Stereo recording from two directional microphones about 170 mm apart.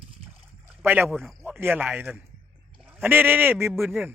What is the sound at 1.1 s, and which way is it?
Speech, centre (ahead or behind).